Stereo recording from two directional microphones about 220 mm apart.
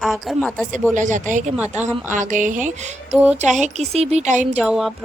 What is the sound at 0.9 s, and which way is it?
Speech, 35° right (ahead or behind).